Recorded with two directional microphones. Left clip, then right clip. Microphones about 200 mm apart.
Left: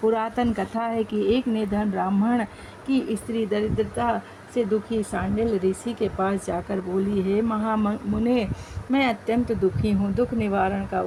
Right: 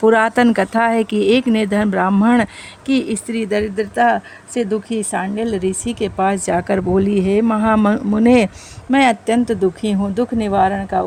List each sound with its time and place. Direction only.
0.0 s speech: 45° right (ahead or behind)